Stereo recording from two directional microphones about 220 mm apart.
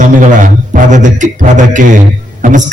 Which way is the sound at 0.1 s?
35° right (ahead or behind).